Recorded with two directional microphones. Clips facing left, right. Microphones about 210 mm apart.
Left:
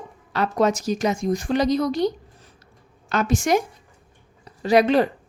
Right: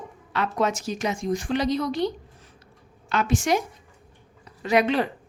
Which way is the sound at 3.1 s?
40° left (ahead or behind).